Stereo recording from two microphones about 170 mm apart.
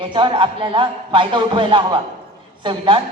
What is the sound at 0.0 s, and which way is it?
A man's voice, 30° right (ahead or behind).